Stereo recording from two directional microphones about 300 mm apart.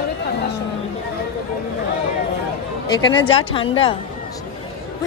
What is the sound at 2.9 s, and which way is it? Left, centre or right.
Speech, centre.